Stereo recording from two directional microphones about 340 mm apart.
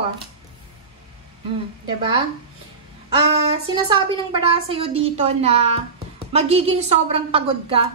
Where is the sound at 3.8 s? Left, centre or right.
Centre.